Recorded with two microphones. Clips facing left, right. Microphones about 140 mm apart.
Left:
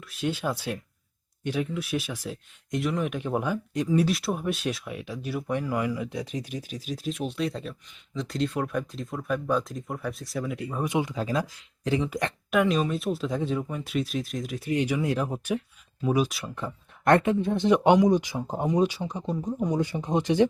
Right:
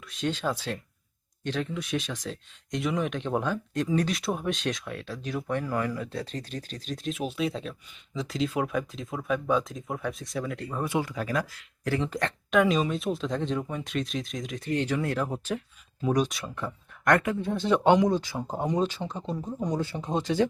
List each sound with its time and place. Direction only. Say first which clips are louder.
0.1 s speech: even; 10° left (ahead or behind)
12.0 s speech: left 1 dB; 10° left (ahead or behind)
16.0 s speech: left 1 dB; 5° left (ahead or behind)
16.6 s speech: right 1 dB; 25° left (ahead or behind)